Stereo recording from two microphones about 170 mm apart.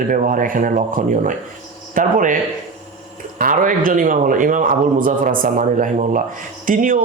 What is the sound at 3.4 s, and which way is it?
Speech, 55° right (ahead or behind).